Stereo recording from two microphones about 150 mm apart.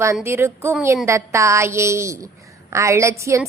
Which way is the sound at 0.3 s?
15° right (ahead or behind).